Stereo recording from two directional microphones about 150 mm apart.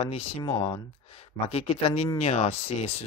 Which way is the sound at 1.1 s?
45° left (ahead or behind).